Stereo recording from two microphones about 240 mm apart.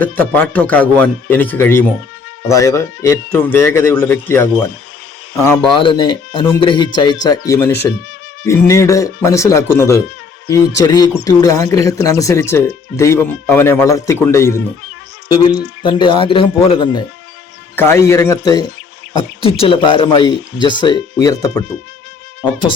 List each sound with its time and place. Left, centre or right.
0.0 s speech: centre
5.7 s speech: centre
15.8 s speech: centre